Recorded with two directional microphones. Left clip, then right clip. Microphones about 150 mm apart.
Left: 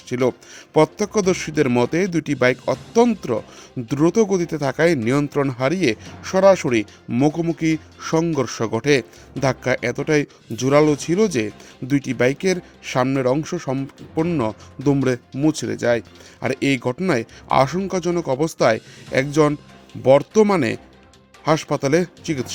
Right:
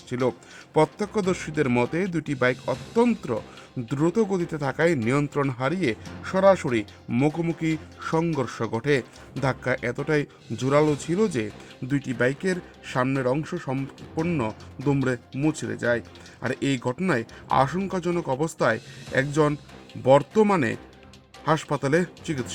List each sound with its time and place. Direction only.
0.1 s a man's voice: 25° left (ahead or behind)